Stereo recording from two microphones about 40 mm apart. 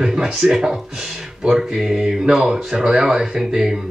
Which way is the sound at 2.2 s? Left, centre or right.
Centre.